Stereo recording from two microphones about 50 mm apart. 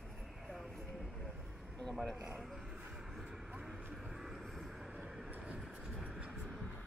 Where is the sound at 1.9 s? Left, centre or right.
Centre.